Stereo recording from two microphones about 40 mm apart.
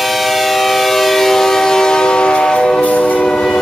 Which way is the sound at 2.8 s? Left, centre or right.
Left.